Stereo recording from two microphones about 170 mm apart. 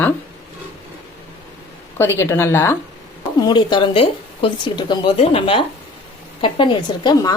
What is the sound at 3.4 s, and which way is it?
Speech, 25° left (ahead or behind).